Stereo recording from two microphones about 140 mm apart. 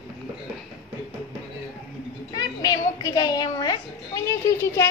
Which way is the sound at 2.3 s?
25° left (ahead or behind).